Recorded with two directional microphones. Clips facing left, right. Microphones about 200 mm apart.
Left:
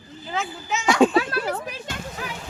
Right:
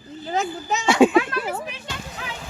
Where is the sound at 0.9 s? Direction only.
5° right (ahead or behind).